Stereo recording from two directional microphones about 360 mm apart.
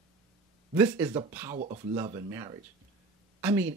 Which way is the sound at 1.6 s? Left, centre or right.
Right.